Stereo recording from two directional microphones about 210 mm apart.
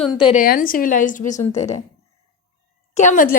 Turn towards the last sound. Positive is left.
turn(degrees=40)  # may be behind; listen again after turning